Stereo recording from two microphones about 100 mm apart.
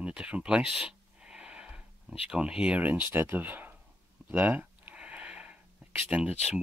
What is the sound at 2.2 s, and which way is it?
Speech, 10° right (ahead or behind).